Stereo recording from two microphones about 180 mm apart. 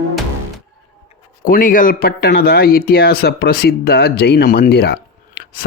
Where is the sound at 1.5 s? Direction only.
50° left (ahead or behind).